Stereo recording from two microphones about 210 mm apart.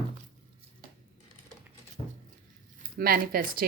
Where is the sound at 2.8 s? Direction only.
45° right (ahead or behind).